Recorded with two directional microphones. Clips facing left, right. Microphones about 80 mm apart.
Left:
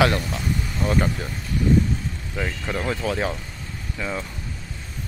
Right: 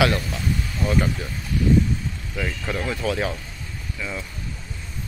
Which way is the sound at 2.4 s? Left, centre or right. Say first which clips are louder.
Even; left.